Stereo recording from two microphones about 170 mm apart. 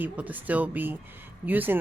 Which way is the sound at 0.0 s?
10° right (ahead or behind).